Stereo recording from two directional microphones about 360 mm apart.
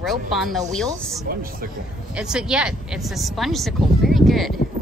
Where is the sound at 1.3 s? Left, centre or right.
Right.